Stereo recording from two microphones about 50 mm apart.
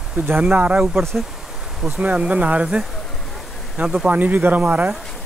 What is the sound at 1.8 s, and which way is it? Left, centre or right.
Speech, centre.